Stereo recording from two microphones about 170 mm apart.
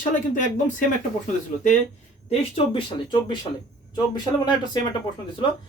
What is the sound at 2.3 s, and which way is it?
Speech, 35° left (ahead or behind).